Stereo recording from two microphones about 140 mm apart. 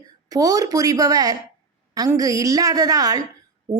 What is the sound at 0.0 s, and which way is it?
A woman's voice, 25° right (ahead or behind).